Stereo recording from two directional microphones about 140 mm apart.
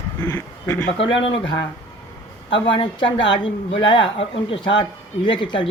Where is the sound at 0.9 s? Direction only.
40° left (ahead or behind).